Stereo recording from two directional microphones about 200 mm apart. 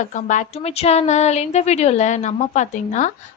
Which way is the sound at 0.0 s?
40° left (ahead or behind).